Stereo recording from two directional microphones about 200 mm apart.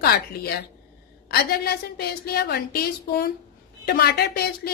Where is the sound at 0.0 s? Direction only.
50° left (ahead or behind).